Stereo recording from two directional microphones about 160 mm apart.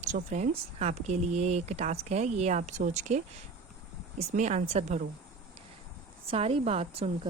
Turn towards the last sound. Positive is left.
turn(degrees=-40)  # may be behind; listen again after turning